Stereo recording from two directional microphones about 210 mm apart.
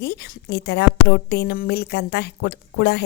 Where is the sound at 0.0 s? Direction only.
50° left (ahead or behind).